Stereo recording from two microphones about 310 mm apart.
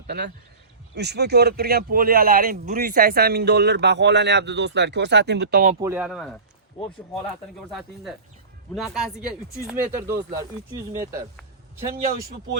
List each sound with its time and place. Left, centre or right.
0.9 s speech: right
5.8 s a man's voice: centre
7.7 s a man's voice: centre